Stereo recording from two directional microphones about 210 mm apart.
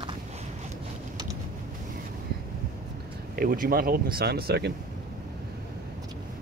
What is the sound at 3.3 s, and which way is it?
Speech, 45° right (ahead or behind).